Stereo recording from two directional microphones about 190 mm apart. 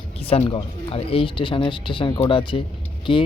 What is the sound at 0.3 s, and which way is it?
Speech, 30° left (ahead or behind).